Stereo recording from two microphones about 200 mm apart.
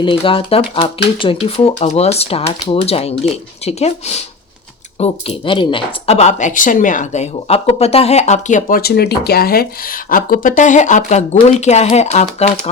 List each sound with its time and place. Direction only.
0.0 s speech: 25° left (ahead or behind)